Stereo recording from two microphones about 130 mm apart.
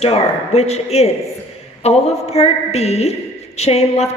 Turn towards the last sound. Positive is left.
turn(degrees=55)  # may be behind; listen again after turning